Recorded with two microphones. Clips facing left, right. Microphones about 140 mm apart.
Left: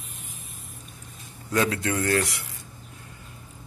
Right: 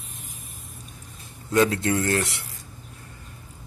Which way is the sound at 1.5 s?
30° right (ahead or behind).